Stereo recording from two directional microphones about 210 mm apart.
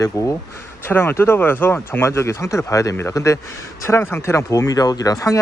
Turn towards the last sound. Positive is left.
turn(degrees=15)  # may be behind; listen again after turning